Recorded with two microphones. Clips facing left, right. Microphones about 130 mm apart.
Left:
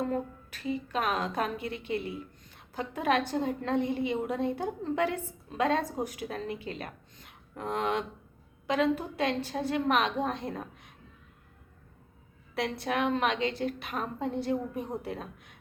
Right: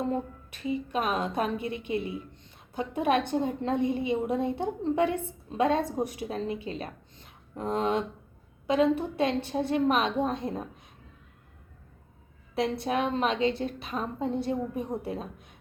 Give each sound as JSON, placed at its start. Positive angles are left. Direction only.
{"t": 0.0, "sound": "a woman's voice", "side_deg": -25}
{"t": 12.5, "sound": "a woman's voice", "side_deg": -25}